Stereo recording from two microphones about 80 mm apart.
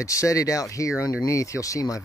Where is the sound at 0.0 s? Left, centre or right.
Left.